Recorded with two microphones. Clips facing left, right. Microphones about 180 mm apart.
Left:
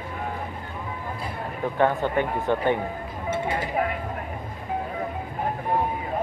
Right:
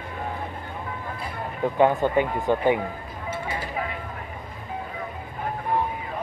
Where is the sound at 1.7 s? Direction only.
15° right (ahead or behind).